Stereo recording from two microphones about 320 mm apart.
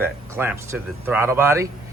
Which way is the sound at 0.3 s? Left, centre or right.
Centre.